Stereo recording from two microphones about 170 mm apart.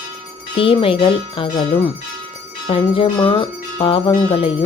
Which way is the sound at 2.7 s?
30° left (ahead or behind).